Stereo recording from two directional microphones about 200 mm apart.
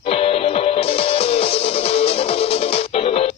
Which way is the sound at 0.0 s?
30° left (ahead or behind).